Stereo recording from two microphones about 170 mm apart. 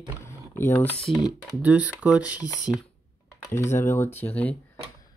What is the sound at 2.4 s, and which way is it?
Speech, 20° left (ahead or behind).